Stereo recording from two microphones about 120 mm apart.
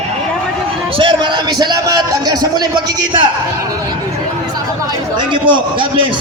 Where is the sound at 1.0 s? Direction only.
45° right (ahead or behind).